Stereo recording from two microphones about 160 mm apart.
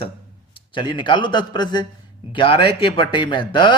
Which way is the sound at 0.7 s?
30° left (ahead or behind).